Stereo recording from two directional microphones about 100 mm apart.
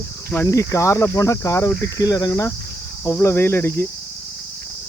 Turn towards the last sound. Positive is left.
turn(degrees=20)  # may be behind; listen again after turning